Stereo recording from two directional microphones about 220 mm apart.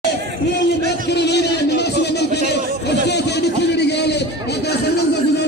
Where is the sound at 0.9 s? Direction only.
50° left (ahead or behind).